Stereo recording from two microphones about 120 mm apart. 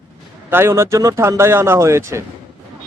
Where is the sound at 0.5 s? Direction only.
20° right (ahead or behind).